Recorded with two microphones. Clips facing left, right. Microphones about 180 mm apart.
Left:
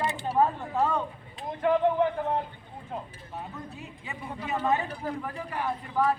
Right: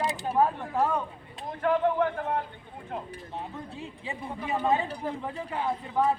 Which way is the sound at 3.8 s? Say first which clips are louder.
Right 3 dB; 30° right (ahead or behind).